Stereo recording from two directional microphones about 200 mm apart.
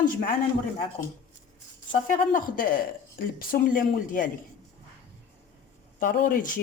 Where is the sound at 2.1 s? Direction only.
45° left (ahead or behind).